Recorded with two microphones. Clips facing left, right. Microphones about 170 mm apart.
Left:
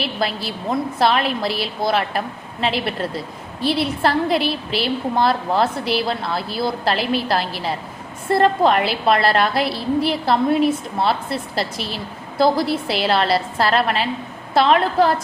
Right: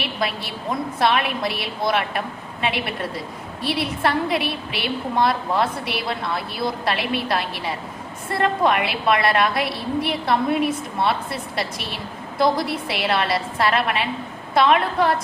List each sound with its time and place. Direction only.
0.9 s a woman's voice: 30° left (ahead or behind)
12.4 s a woman's voice: 30° left (ahead or behind)